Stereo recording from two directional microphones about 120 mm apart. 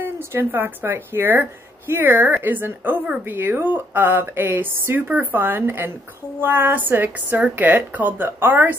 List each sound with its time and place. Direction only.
0.0 s speech: 15° right (ahead or behind)